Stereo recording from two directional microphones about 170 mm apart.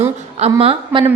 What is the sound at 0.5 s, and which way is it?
Speech, 30° right (ahead or behind).